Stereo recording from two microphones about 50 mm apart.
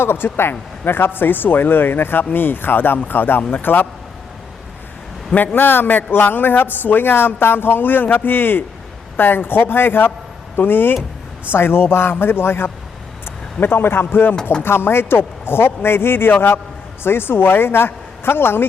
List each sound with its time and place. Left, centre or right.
0.0 s a man's voice: left
5.5 s a man's voice: left